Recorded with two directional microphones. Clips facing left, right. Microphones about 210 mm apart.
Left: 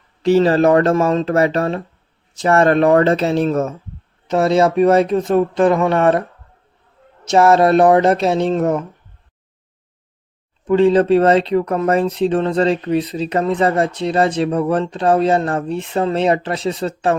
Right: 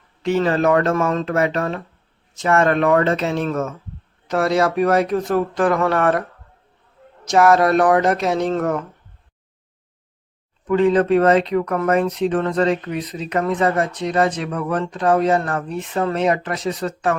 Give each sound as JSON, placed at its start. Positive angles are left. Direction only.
{"t": 0.2, "sound": "speech", "side_deg": 35}
{"t": 4.3, "sound": "speech", "side_deg": 25}
{"t": 7.3, "sound": "speech", "side_deg": 25}
{"t": 10.7, "sound": "speech", "side_deg": 30}